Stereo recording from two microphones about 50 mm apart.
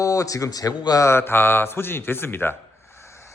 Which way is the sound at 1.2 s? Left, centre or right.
Left.